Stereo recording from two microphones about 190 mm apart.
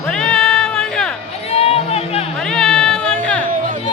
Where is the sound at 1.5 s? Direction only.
30° left (ahead or behind).